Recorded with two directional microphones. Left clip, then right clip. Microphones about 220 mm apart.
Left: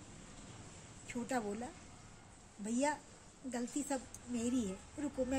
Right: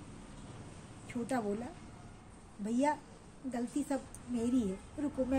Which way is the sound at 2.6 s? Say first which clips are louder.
Right 4 dB; 20° left (ahead or behind).